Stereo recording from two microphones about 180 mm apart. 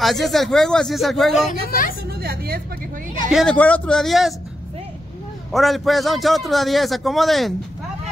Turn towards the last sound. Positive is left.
turn(degrees=0)  # may be behind; listen again after turning